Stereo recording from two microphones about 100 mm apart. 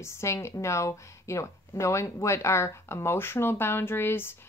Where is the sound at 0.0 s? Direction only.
30° left (ahead or behind).